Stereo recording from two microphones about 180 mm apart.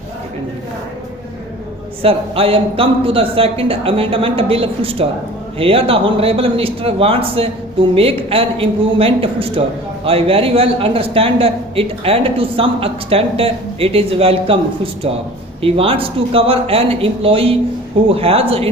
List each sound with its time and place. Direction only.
2.0 s a man's voice: 30° right (ahead or behind)
15.6 s a man's voice: 30° right (ahead or behind)